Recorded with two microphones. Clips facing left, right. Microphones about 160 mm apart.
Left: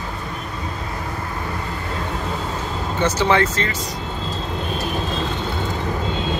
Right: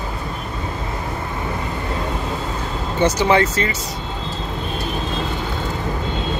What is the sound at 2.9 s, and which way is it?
Speech, 15° right (ahead or behind).